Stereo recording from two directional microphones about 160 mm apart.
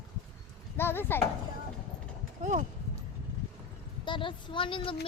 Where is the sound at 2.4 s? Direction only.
50° right (ahead or behind).